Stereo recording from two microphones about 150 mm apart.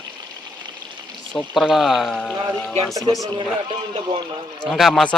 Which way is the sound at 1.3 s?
5° left (ahead or behind).